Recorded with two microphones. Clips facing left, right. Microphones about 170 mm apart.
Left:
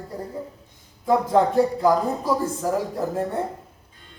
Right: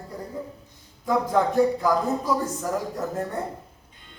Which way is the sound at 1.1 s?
30° left (ahead or behind).